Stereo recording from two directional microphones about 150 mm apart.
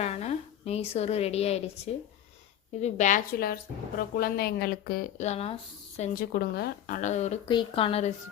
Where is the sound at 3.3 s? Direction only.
80° left.